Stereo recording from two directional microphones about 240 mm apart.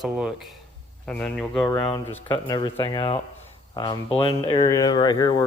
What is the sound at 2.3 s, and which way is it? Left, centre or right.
A man's voice, centre.